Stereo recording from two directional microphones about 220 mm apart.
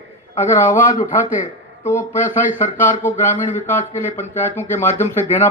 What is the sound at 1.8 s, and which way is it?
Speech, 10° left (ahead or behind).